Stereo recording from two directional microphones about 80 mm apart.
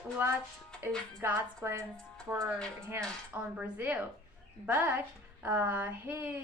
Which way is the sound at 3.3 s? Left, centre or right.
Centre.